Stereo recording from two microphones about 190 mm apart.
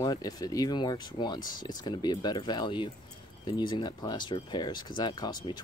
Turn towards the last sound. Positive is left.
turn(degrees=20)  # may be behind; listen again after turning